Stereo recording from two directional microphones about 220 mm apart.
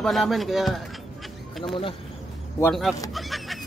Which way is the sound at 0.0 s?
Centre (ahead or behind).